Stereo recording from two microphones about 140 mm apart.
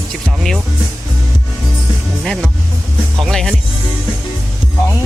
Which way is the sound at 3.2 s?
Centre (ahead or behind).